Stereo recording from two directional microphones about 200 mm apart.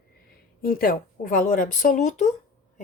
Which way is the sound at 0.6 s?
45° left (ahead or behind).